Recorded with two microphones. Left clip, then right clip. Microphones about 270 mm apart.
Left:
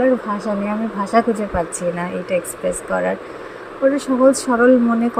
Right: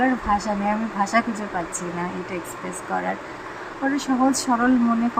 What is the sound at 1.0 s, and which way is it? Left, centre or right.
Speech, centre.